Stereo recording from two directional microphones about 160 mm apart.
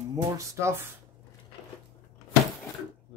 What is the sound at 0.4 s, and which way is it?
Speech, 15° right (ahead or behind).